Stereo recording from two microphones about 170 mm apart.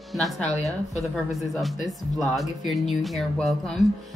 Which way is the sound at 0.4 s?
40° left (ahead or behind).